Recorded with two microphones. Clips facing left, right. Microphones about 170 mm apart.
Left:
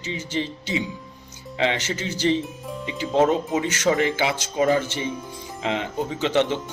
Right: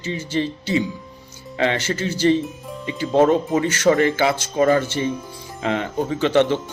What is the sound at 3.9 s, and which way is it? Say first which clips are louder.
Speech: right 4 dB; 15° left (ahead or behind).